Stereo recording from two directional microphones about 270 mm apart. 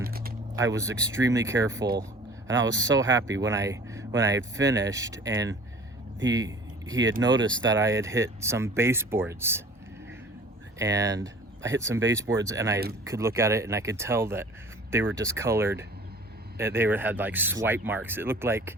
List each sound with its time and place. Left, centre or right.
0.0 s vehicle: right
0.6 s speech: centre
6.3 s a sound: centre
7.7 s speech: centre
10.8 s speech: centre